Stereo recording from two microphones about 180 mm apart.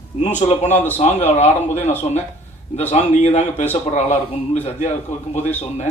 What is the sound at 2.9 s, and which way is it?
A man's voice, 40° left (ahead or behind).